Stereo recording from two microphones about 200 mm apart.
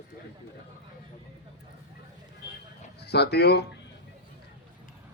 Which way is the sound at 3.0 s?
55° left (ahead or behind).